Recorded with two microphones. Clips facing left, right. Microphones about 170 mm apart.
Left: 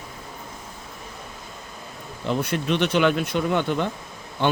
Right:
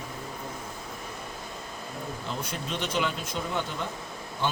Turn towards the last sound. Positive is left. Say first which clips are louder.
# left 8 dB
turn(degrees=70)  # may be behind; listen again after turning